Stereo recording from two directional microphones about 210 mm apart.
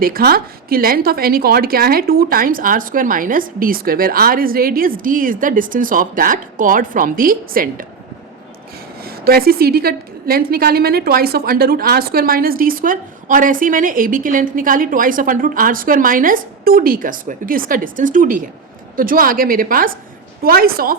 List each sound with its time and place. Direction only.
0.0 s a woman's voice: 45° right (ahead or behind)
9.0 s a woman's voice: 45° right (ahead or behind)